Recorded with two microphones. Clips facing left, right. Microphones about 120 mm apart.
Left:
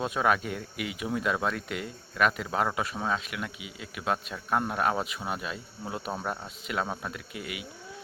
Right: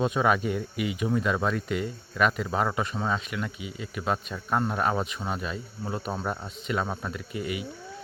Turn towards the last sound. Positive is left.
turn(degrees=0)  # may be behind; listen again after turning